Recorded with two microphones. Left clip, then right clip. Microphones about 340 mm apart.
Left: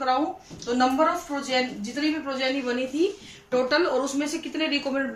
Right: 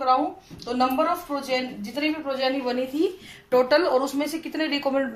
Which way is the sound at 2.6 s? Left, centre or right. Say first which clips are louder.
Right 1 dB; centre.